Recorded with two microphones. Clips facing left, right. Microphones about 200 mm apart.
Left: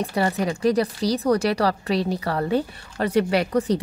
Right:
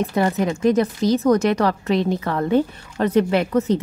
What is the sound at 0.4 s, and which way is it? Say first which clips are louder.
A woman's voice: right 3 dB; 35° left (ahead or behind).